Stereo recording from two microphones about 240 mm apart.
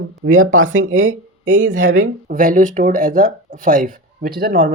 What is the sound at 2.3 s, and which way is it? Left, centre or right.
Speech, right.